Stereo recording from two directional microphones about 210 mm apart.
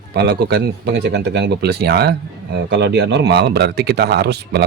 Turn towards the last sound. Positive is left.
turn(degrees=-50)  # may be behind; listen again after turning